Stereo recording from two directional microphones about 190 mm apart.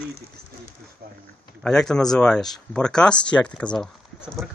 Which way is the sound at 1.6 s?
5° left (ahead or behind).